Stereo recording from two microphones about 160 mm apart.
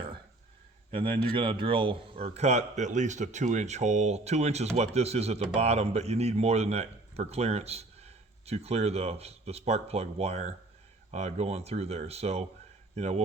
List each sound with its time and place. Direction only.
0.9 s a man's voice: 35° right (ahead or behind)